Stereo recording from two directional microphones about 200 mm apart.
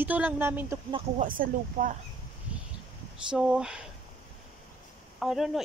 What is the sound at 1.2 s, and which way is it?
Speech, 45° right (ahead or behind).